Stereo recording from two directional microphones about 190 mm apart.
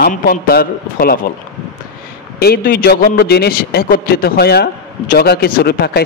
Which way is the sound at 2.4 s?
55° left (ahead or behind).